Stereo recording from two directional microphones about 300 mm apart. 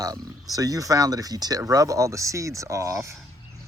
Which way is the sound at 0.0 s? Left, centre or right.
Centre.